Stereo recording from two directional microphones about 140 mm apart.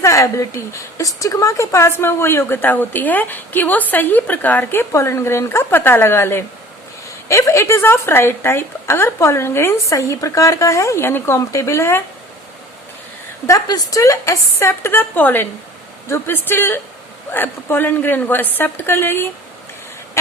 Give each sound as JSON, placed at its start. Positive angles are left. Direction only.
{"t": 0.0, "sound": "a woman's voice", "side_deg": 20}
{"t": 13.5, "sound": "a woman's voice", "side_deg": 25}